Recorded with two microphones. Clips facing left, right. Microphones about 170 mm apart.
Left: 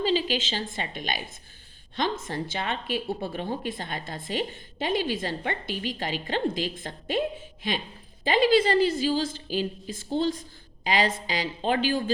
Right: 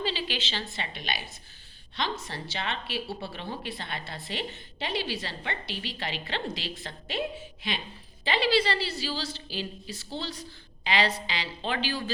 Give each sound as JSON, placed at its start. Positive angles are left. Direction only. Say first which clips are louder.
{"t": 0.0, "sound": "a woman's voice", "louder": "left 7 dB", "side_deg": 45}